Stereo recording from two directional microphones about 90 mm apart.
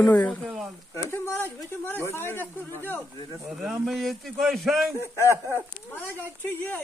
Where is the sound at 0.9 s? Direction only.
25° left (ahead or behind).